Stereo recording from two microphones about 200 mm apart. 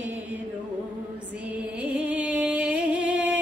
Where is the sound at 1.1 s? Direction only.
5° right (ahead or behind).